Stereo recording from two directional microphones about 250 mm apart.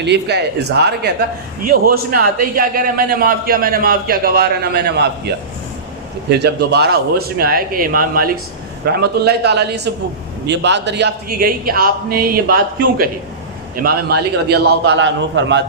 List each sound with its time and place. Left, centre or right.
0.0 s a man's voice: right
6.3 s a man's voice: right